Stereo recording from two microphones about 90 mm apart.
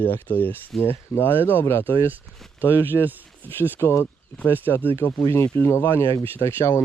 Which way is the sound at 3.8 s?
30° left (ahead or behind).